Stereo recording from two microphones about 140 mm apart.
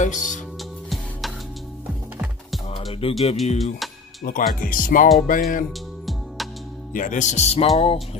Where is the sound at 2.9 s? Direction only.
40° left (ahead or behind).